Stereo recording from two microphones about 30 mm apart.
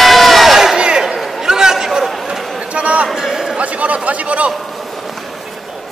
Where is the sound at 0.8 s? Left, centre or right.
Right.